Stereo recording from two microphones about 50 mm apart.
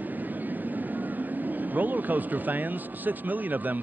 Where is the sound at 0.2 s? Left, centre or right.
Right.